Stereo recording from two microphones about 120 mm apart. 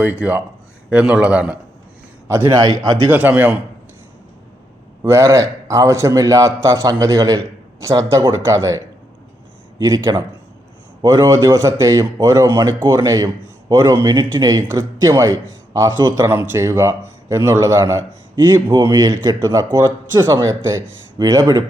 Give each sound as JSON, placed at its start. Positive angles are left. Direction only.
{"t": 0.0, "sound": "a man's voice", "side_deg": -15}
{"t": 2.2, "sound": "a man's voice", "side_deg": -25}
{"t": 3.1, "sound": "a man's voice", "side_deg": -15}
{"t": 5.0, "sound": "a man's voice", "side_deg": -25}